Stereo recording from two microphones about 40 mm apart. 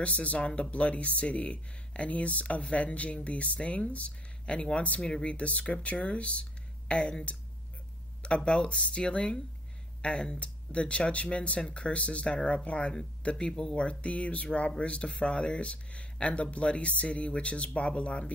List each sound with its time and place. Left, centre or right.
0.0 s speech: left
8.5 s speech: left
13.5 s speech: centre
13.7 s speech: left